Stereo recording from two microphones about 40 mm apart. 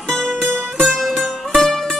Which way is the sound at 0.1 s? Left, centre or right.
Centre.